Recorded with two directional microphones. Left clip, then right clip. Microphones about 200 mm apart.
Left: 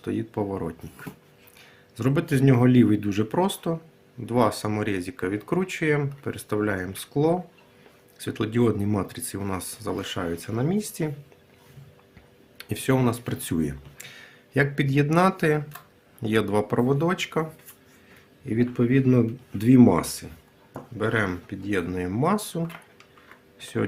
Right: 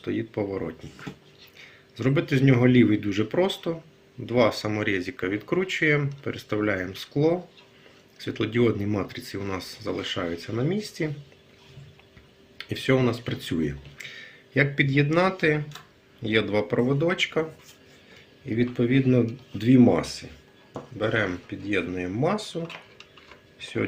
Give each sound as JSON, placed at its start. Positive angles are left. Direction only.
{"t": 0.0, "sound": "speech", "side_deg": 45}
{"t": 12.5, "sound": "speech", "side_deg": 50}
{"t": 18.4, "sound": "speech", "side_deg": 45}
{"t": 23.6, "sound": "speech", "side_deg": 55}